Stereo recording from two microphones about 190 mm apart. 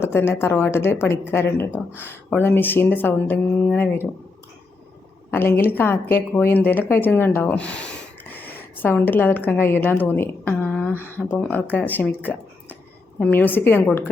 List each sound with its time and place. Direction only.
0.0 s speech: 10° left (ahead or behind)
5.3 s a woman's voice: 10° left (ahead or behind)